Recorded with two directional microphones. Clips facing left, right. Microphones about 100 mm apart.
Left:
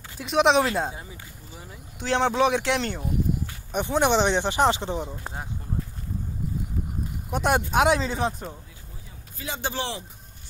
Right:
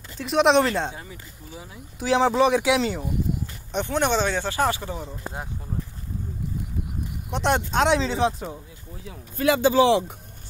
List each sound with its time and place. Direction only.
0.2 s speech: centre (ahead or behind)
1.6 s speech: 5° right (ahead or behind)
3.7 s speech: 15° left (ahead or behind)
7.2 s speech: 5° left (ahead or behind)
9.4 s speech: 90° right